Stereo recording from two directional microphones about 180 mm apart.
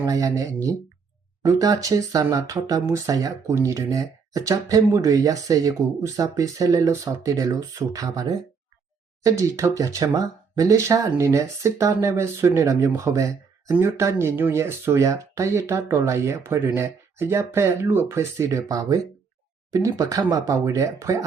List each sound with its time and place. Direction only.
0.0 s speech: 20° right (ahead or behind)